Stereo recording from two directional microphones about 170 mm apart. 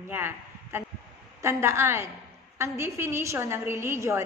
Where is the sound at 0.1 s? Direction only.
15° right (ahead or behind).